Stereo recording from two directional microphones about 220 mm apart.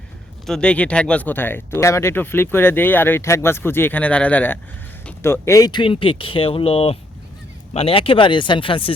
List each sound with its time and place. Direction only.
0.4 s speech: 5° left (ahead or behind); by 8.9 s 25° left (ahead or behind)